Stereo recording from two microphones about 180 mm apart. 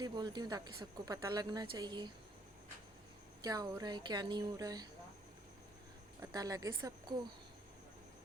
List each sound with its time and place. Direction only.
0.0 s speech: 25° right (ahead or behind)
3.4 s speech: 20° right (ahead or behind)
6.3 s speech: 20° right (ahead or behind)